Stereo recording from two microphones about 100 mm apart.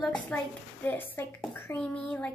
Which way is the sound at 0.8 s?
20° left (ahead or behind).